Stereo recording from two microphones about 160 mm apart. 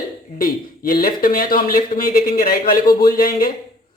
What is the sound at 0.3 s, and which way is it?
Speech, 60° left (ahead or behind).